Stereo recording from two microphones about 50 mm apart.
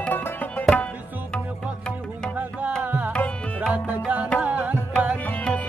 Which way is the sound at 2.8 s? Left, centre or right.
Right.